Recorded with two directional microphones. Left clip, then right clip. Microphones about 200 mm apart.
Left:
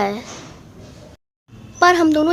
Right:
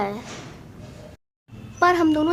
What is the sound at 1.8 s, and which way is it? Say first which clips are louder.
Speech: left 5 dB; 15° left (ahead or behind).